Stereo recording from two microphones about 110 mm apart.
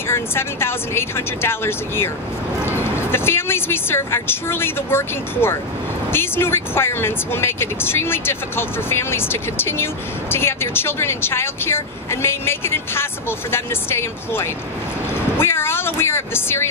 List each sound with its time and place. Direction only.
0.1 s speech: 20° left (ahead or behind)